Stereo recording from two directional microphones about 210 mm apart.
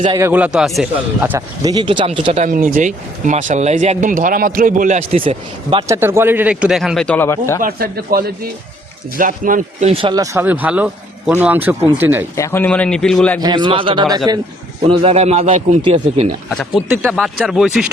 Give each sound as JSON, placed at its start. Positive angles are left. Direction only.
{"t": 0.2, "sound": "a man's voice", "side_deg": -10}
{"t": 5.9, "sound": "speech", "side_deg": -10}
{"t": 7.6, "sound": "a man's voice", "side_deg": -45}
{"t": 9.9, "sound": "a man's voice", "side_deg": -25}
{"t": 10.3, "sound": "a man's voice", "side_deg": -10}
{"t": 12.4, "sound": "a man's voice", "side_deg": 10}
{"t": 13.4, "sound": "a man's voice", "side_deg": -20}
{"t": 16.5, "sound": "speech", "side_deg": 0}